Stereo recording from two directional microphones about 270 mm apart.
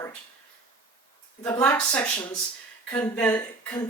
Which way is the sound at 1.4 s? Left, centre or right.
Centre.